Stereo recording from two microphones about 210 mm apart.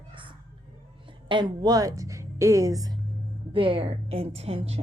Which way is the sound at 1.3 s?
20° right (ahead or behind).